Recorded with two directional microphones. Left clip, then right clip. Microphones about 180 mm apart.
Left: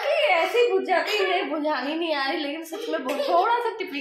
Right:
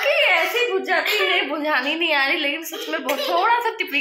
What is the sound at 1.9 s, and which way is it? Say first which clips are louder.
A woman's voice: right 6 dB; 5° right (ahead or behind).